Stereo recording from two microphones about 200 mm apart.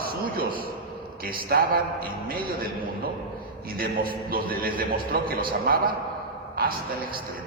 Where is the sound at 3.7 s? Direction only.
45° right (ahead or behind).